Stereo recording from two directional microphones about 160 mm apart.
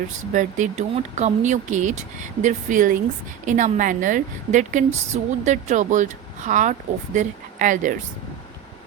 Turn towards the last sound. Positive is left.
turn(degrees=-55)  # may be behind; listen again after turning